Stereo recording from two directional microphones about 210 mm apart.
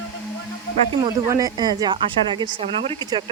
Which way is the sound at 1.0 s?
15° right (ahead or behind).